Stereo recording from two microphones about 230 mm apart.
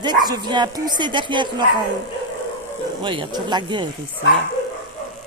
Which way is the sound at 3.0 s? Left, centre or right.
Centre.